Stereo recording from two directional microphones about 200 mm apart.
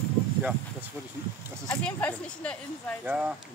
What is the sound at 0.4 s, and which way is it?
Speech, 5° right (ahead or behind).